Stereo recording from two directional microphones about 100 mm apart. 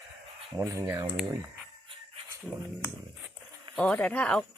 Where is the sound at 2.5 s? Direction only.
5° right (ahead or behind).